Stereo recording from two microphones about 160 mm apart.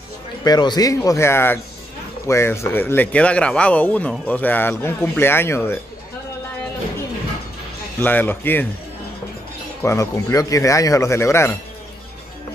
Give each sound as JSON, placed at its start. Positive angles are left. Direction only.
{"t": 0.4, "sound": "speech", "side_deg": 25}
{"t": 8.0, "sound": "speech", "side_deg": 10}
{"t": 9.8, "sound": "speech", "side_deg": 20}